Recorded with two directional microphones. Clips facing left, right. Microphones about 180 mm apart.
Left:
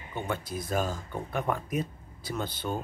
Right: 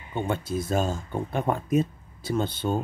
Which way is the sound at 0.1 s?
25° right (ahead or behind).